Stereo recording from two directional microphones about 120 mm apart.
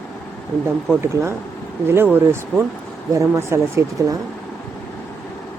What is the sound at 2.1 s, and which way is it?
Speech, 20° right (ahead or behind).